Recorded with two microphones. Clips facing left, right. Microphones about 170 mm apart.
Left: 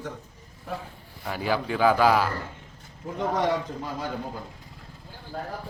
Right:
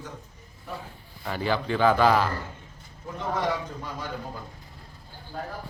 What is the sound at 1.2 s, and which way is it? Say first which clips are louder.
Speech: even; 5° left (ahead or behind).